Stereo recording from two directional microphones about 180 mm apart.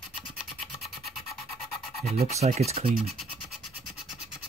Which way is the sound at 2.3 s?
35° right (ahead or behind).